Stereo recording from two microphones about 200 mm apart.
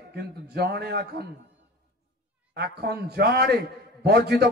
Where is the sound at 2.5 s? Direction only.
55° right (ahead or behind).